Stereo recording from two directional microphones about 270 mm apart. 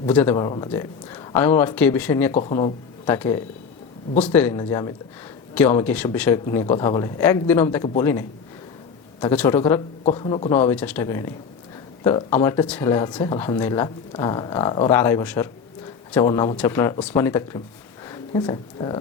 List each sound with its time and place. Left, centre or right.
0.0 s speech: centre
2.3 s speech: centre
9.3 s a man's voice: centre
10.5 s speech: centre